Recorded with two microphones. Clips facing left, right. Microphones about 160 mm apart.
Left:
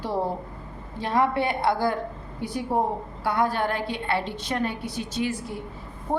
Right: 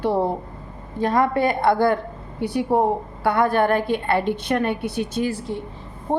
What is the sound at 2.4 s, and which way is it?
A woman's voice, 70° right (ahead or behind).